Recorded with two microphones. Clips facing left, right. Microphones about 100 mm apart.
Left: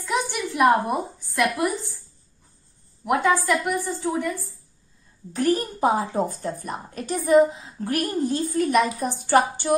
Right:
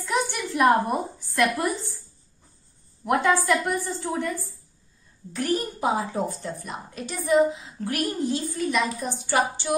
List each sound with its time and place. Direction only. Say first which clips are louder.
0.0 s a woman's voice: left 1 dB; 10° left (ahead or behind)
3.1 s a woman's voice: left 1 dB; 5° left (ahead or behind)
5.3 s a woman's voice: left 4 dB; 35° left (ahead or behind)